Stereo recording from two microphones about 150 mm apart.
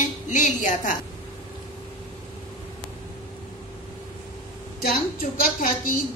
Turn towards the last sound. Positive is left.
turn(degrees=70)  # may be behind; listen again after turning